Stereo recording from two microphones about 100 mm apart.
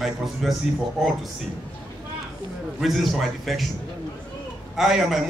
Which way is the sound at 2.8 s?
Centre (ahead or behind).